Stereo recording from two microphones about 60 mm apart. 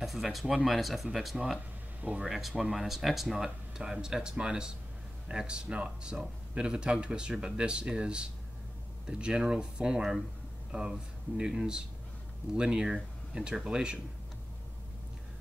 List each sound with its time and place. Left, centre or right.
0.0 s speech: centre